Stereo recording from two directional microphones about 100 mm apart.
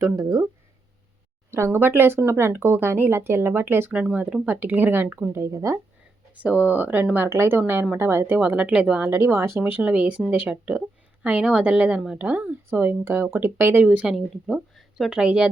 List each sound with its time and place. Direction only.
0.0 s speech: 35° right (ahead or behind)
1.5 s speech: 25° right (ahead or behind)
5.3 s speech: 30° right (ahead or behind)
6.4 s speech: 15° right (ahead or behind)
8.4 s speech: 15° right (ahead or behind)
9.0 s speech: 25° right (ahead or behind); by 15.4 s 10° right (ahead or behind)